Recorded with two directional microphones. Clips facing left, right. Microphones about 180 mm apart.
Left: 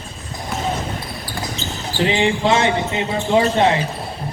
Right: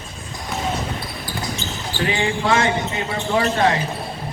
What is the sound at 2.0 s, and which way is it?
Speech, 20° left (ahead or behind).